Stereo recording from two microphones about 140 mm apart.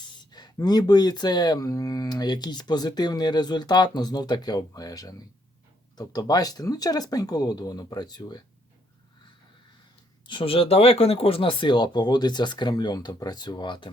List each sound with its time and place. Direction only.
0.3 s speech: 30° left (ahead or behind)
10.2 s speech: 40° left (ahead or behind)